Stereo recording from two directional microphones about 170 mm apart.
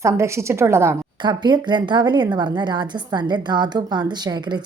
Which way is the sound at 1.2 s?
25° right (ahead or behind).